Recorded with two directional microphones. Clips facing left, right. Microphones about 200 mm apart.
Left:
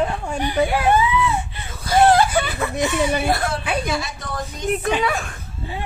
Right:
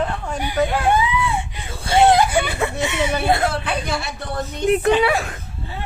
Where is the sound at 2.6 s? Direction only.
25° right (ahead or behind).